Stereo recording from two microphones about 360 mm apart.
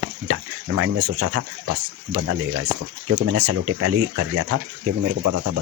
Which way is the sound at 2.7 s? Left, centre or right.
Right.